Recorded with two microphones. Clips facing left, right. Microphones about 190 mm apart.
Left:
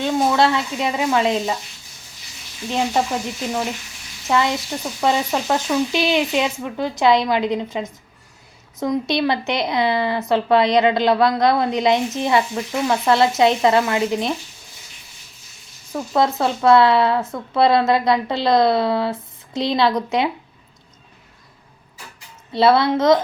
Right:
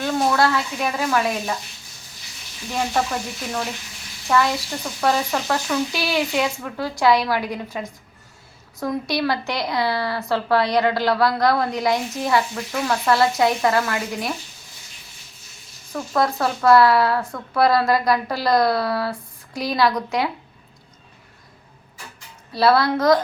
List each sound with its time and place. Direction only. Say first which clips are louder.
0.0 s sizzle: left 2 dB; 20° left (ahead or behind)
2.6 s speech: left 3 dB; 20° left (ahead or behind)
15.9 s speech: left 2 dB; 20° left (ahead or behind)
22.5 s speech: left 2 dB; 25° left (ahead or behind)